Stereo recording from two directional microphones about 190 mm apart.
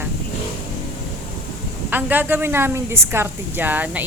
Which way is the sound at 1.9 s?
10° right (ahead or behind).